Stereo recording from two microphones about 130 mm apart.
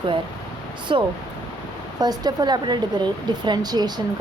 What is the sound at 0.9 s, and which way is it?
A woman's voice, 40° right (ahead or behind).